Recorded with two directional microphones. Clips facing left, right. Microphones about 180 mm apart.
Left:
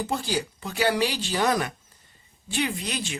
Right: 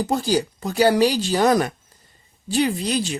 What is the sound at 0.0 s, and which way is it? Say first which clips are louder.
Speech: right 7 dB; 40° right (ahead or behind).